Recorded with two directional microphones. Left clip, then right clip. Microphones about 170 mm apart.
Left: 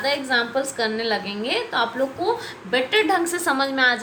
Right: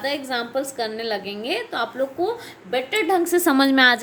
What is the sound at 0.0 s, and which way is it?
A woman's voice, 45° right (ahead or behind).